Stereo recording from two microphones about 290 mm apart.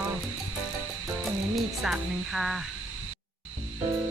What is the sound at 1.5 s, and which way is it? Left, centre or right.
Speech, centre.